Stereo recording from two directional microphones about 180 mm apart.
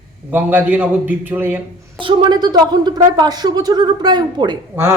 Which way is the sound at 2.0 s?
25° right (ahead or behind).